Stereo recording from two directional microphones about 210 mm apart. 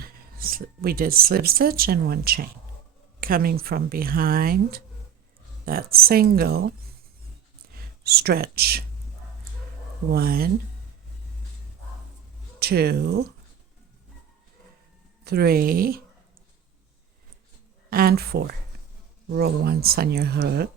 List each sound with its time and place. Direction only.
0.0 s speech: 45° right (ahead or behind)
10.1 s speech: 45° right (ahead or behind)
12.5 s speech: 50° right (ahead or behind)
15.2 s speech: 50° right (ahead or behind)
17.9 s speech: 45° right (ahead or behind)